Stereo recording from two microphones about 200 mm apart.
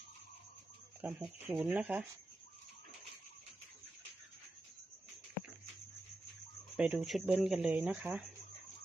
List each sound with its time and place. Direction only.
1.0 s speech: 5° right (ahead or behind)
6.7 s speech: 5° right (ahead or behind)